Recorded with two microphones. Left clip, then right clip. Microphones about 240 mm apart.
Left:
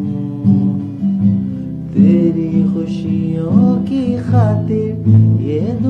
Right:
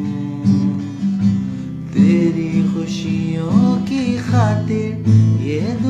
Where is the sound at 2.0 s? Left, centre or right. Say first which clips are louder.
Left 2 dB; centre.